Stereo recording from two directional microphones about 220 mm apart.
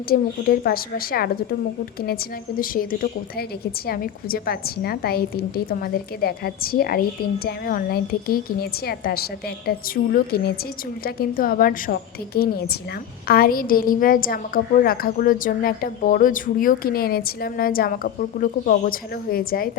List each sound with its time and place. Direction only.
0.1 s a woman's voice: 40° left (ahead or behind)
2.6 s a woman's voice: 40° left (ahead or behind)